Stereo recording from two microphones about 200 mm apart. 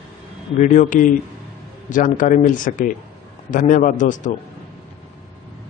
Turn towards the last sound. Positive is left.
turn(degrees=40)  # may be behind; listen again after turning